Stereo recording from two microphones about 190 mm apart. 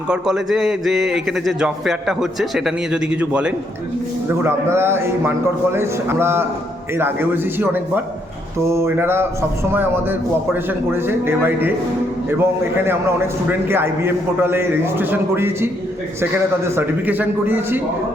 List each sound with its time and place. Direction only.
0.1 s a man's voice: 5° right (ahead or behind)